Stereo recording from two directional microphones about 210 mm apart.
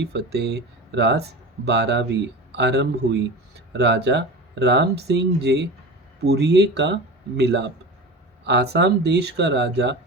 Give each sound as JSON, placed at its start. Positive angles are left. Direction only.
{"t": 0.0, "sound": "speech", "side_deg": -55}